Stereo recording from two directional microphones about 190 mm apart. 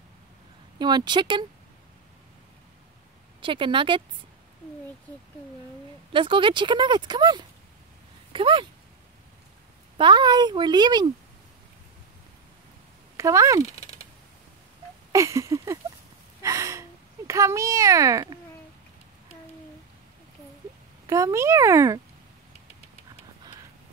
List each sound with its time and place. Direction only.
0.7 s speech: 25° right (ahead or behind)
3.3 s speech: 25° right (ahead or behind)
6.1 s speech: 25° right (ahead or behind)
9.9 s speech: 25° right (ahead or behind)
13.2 s a child's voice: 15° right (ahead or behind)
13.7 s typing: 30° left (ahead or behind)
15.1 s a child's voice: 15° right (ahead or behind)
16.4 s gasp: 15° right (ahead or behind)
17.3 s a child's voice: 15° right (ahead or behind)
21.1 s a child's voice: 15° right (ahead or behind)